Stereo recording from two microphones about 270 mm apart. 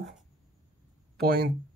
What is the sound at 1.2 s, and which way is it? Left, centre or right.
Speech, right.